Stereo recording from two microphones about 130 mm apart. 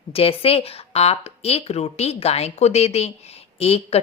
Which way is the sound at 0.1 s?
45° left (ahead or behind).